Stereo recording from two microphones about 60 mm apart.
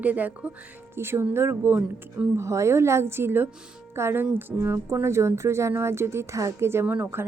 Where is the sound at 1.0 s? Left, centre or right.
Right.